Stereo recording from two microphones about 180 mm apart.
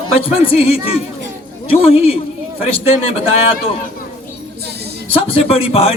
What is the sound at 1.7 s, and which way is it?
Speech, 35° left (ahead or behind).